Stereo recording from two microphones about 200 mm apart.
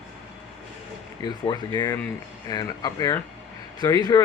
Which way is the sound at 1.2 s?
20° left (ahead or behind).